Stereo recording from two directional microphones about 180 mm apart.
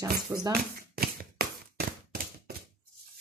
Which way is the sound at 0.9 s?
55° right (ahead or behind).